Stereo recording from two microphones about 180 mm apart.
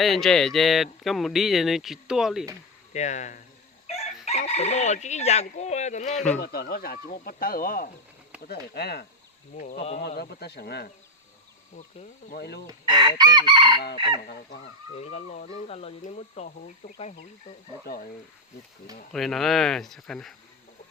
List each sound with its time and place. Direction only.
0.0 s speech: centre (ahead or behind)
2.9 s speech: 40° left (ahead or behind)
3.8 s crowing: 35° left (ahead or behind)
6.4 s speech: 55° left (ahead or behind)
8.4 s speech: 65° left (ahead or behind)
12.3 s speech: 65° left (ahead or behind)
12.6 s chicken: 25° right (ahead or behind)
14.9 s speech: 35° left (ahead or behind)
19.1 s speech: centre (ahead or behind)